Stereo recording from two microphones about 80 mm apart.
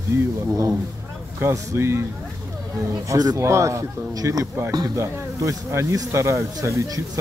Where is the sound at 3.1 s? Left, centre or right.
Right.